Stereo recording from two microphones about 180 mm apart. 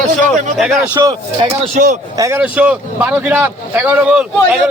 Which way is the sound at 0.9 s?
20° right (ahead or behind).